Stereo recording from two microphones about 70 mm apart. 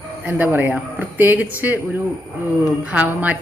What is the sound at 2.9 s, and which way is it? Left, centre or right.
Speech, right.